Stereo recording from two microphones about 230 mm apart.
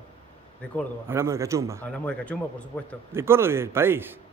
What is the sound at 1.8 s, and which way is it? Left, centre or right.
Speech, centre.